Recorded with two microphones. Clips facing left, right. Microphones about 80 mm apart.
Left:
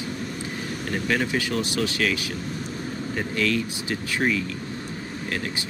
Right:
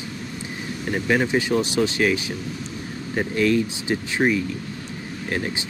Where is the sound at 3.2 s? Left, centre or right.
Right.